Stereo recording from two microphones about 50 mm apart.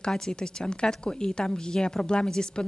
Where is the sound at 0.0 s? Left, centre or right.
Centre.